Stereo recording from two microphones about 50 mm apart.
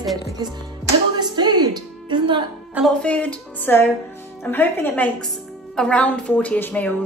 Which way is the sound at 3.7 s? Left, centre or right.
Left.